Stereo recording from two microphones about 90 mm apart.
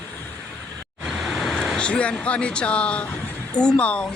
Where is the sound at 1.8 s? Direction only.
15° left (ahead or behind).